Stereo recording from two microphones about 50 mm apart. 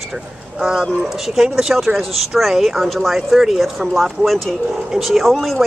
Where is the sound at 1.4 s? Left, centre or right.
Centre.